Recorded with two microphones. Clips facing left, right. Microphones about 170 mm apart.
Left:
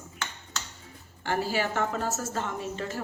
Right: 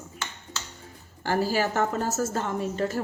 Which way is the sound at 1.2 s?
40° right (ahead or behind).